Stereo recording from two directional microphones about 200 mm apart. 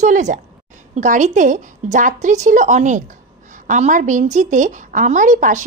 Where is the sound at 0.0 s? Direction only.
35° right (ahead or behind).